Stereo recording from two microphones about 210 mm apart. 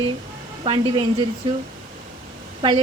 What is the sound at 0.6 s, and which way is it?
Speech, 25° right (ahead or behind).